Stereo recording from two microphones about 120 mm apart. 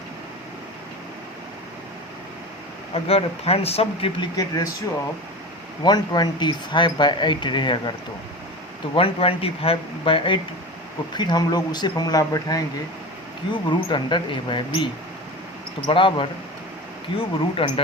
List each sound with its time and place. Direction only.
2.9 s speech: 55° left (ahead or behind)
4.4 s speech: 30° left (ahead or behind)
5.8 s speech: 35° left (ahead or behind)
9.0 s speech: 50° left (ahead or behind)
15.9 s speech: 45° left (ahead or behind)